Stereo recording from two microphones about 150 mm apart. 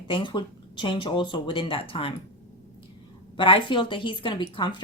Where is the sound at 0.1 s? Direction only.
30° left (ahead or behind).